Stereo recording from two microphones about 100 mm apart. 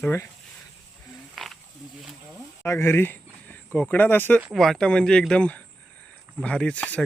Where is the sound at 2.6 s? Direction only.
25° left (ahead or behind).